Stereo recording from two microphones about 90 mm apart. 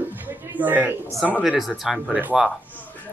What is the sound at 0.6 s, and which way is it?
Speech, 20° right (ahead or behind).